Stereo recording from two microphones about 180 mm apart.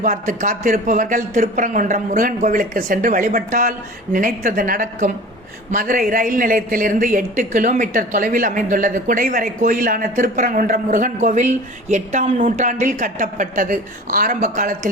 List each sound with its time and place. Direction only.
0.0 s a woman's voice: 50° right (ahead or behind)